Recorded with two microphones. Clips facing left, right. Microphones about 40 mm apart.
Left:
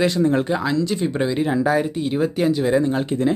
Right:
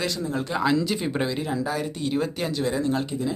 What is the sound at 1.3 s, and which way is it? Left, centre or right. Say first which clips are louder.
Speech: left 7 dB; left.